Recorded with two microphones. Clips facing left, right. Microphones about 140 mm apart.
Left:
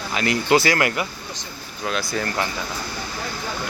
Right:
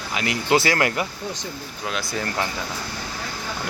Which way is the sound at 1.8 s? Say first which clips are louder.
Left 3 dB; 20° right (ahead or behind).